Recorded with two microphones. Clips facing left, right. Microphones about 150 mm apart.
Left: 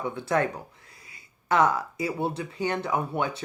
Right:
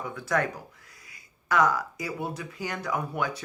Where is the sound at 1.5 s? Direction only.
25° left (ahead or behind).